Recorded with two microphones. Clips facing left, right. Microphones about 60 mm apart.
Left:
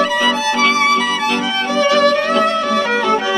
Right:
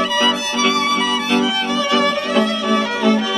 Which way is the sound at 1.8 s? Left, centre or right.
Left.